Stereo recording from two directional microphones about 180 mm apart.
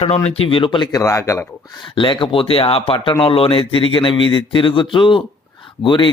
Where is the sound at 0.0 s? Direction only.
35° left (ahead or behind).